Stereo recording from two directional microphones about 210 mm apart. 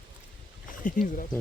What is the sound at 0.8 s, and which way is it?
Speech, 40° left (ahead or behind).